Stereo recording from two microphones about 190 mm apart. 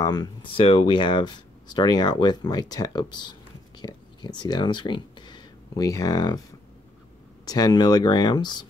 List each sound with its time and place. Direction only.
0.0 s speech: 20° left (ahead or behind)
7.4 s speech: 20° left (ahead or behind)